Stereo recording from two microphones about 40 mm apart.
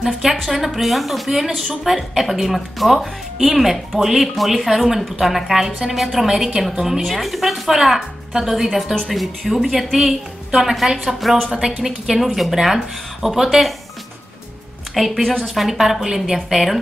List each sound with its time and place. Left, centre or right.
0.0 s a woman's voice: centre
8.6 s a woman's voice: centre
11.8 s a woman's voice: centre
15.0 s a woman's voice: centre